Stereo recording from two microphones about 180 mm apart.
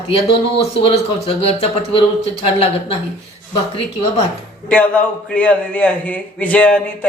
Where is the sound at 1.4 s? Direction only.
35° left (ahead or behind).